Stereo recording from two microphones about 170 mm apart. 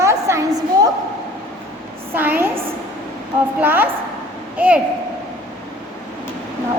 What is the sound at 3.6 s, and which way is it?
A woman's voice, 10° right (ahead or behind).